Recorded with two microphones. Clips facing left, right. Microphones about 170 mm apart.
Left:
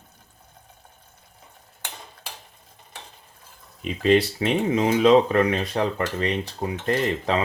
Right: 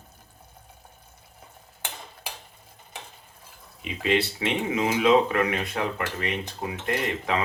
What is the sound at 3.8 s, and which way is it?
Speech, 40° left (ahead or behind).